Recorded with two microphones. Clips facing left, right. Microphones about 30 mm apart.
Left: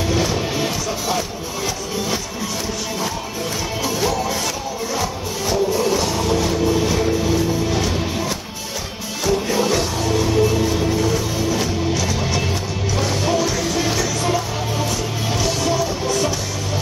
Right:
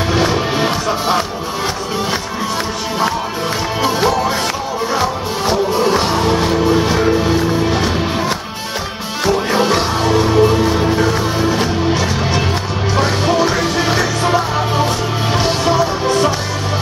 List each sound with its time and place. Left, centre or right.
0.1 s music: right
3.8 s music: right
9.2 s music: right